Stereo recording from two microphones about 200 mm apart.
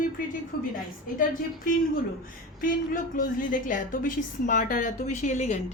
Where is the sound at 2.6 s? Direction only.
45° left (ahead or behind).